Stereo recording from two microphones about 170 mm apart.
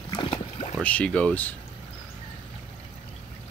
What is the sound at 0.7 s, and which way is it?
Speech, 5° left (ahead or behind).